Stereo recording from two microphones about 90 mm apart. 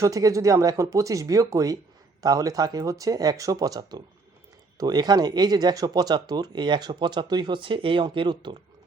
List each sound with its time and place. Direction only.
0.0 s speech: 40° right (ahead or behind); by 8.5 s 60° right (ahead or behind)